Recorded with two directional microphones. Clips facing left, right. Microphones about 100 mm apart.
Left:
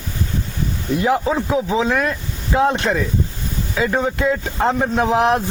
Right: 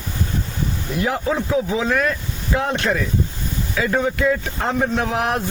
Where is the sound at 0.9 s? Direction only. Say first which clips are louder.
Left 4 dB; 25° left (ahead or behind).